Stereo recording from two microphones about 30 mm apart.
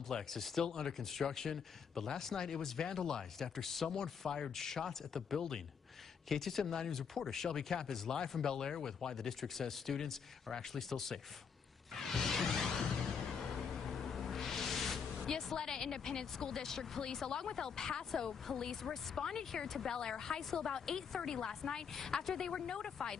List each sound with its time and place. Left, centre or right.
0.1 s speech: centre
11.9 s music: centre
15.5 s speech: centre